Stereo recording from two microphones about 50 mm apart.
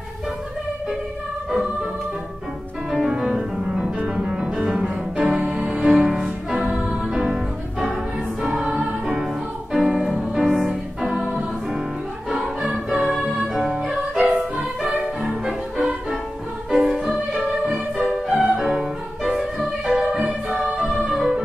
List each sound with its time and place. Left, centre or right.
2.9 s music: centre
6.5 s music: right
7.2 s music: centre
15.4 s music: centre